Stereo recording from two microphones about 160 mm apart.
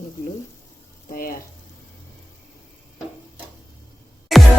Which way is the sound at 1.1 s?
65° left (ahead or behind).